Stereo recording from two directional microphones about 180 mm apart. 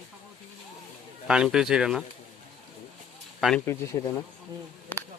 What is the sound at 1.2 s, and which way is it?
Speech, 5° right (ahead or behind).